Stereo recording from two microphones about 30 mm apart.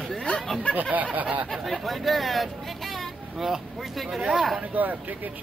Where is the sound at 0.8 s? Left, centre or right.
Right.